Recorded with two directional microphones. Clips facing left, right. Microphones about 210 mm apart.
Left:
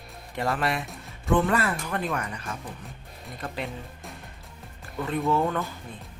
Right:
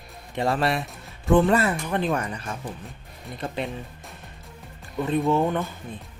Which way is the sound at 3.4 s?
20° right (ahead or behind).